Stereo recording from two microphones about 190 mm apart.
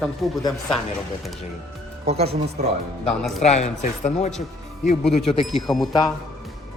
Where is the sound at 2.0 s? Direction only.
30° right (ahead or behind).